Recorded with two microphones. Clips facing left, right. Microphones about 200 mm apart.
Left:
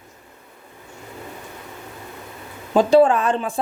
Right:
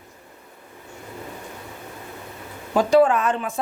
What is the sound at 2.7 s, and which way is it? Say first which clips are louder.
Speech: left 2 dB; 25° left (ahead or behind).